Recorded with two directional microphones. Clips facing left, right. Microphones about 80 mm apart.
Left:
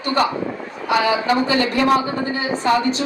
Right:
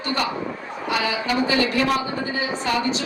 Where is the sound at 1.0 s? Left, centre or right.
Left.